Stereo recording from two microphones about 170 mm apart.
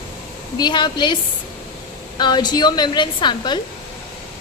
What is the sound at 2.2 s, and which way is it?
A woman's voice, 25° left (ahead or behind).